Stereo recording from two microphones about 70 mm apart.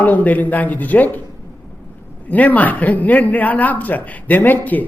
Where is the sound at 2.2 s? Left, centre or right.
Left.